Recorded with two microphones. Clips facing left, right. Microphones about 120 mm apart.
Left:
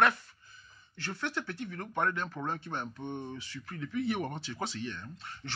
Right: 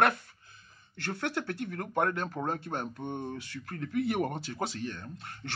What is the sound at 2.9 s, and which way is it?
Speech, 15° right (ahead or behind).